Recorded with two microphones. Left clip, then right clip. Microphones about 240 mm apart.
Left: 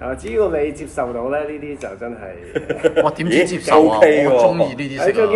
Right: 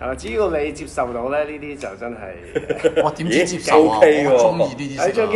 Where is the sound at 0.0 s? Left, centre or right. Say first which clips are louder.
Left 2 dB; centre.